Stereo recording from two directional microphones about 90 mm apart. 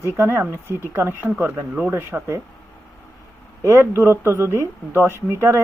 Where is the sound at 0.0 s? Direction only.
30° right (ahead or behind).